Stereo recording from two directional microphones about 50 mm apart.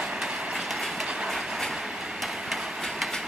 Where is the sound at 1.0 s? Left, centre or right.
Centre.